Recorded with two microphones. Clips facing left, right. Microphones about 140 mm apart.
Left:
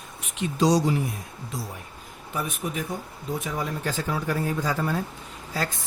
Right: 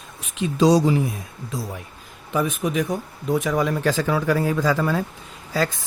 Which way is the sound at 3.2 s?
80° right.